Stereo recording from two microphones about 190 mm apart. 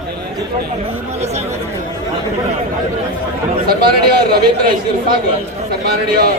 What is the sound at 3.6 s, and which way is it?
Speech, 55° right (ahead or behind).